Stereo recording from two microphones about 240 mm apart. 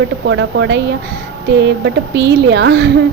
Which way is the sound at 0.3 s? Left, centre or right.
Right.